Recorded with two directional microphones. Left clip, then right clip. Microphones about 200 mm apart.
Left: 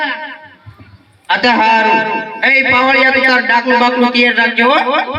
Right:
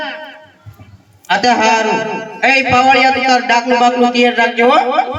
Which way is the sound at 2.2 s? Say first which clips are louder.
Left 1 dB; 25° left (ahead or behind).